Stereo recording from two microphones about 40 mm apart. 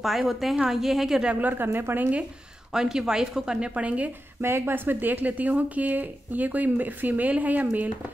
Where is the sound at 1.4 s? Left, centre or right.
Right.